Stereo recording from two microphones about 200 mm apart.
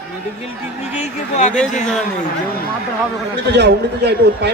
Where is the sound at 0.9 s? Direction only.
35° left (ahead or behind).